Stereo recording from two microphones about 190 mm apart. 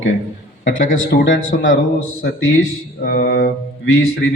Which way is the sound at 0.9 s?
75° left (ahead or behind).